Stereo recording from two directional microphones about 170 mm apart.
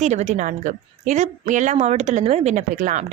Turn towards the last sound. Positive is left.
turn(degrees=-45)  # may be behind; listen again after turning